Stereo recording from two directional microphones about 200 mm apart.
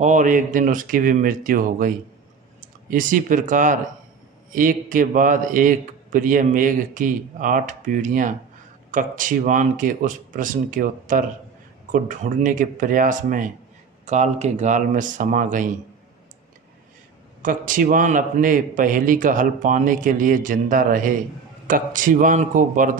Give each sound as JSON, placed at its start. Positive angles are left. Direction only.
{"t": 0.0, "sound": "a man's voice", "side_deg": -40}
{"t": 2.9, "sound": "a man's voice", "side_deg": -40}
{"t": 17.4, "sound": "a man's voice", "side_deg": -40}